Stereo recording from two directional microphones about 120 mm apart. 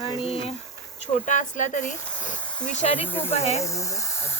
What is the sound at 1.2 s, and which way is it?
Speech, 90° left.